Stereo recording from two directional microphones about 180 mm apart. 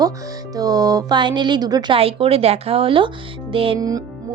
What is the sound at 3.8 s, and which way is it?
Speech, 20° right (ahead or behind).